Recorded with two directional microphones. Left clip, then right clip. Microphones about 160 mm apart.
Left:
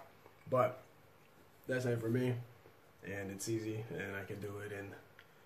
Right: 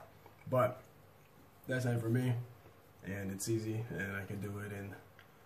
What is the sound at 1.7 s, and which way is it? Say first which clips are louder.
Speech: left 1 dB; 10° left (ahead or behind).